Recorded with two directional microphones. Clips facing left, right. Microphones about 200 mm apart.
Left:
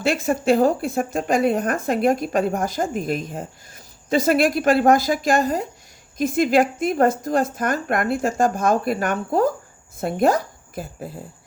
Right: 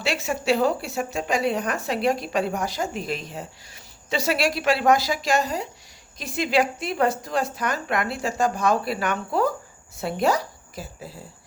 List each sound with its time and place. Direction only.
0.0 s a woman's voice: 50° left (ahead or behind)